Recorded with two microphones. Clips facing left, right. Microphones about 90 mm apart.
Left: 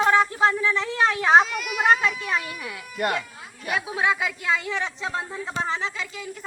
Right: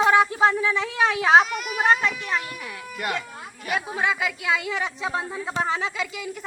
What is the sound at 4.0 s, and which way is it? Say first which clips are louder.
A woman's voice: left 3 dB; centre (ahead or behind).